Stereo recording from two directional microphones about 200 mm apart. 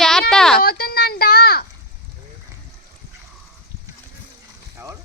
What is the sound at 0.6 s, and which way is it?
Speech, 50° left (ahead or behind).